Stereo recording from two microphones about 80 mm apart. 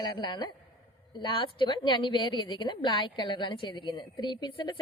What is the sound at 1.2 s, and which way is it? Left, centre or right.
A woman's voice, left.